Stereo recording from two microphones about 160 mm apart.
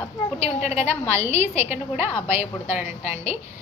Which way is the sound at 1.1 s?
15° right (ahead or behind).